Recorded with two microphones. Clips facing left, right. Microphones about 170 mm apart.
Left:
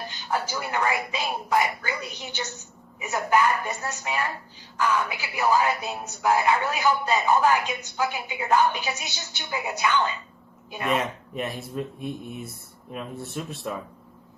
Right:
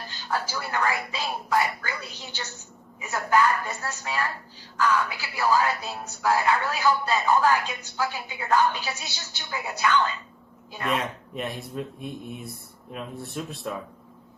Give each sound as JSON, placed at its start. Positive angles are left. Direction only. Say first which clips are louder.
{"t": 0.1, "sound": "speech", "louder": "even", "side_deg": 15}
{"t": 10.8, "sound": "speech", "louder": "left 2 dB", "side_deg": 0}